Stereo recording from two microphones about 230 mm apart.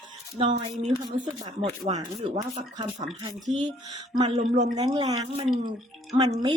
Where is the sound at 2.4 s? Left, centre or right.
Centre.